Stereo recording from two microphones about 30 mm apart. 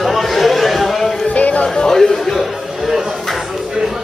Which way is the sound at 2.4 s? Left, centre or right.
Centre.